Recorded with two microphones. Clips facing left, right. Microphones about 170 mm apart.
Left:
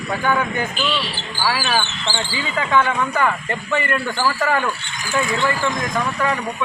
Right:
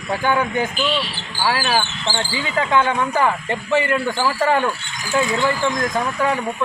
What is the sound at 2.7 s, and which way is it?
Speech, 30° right (ahead or behind).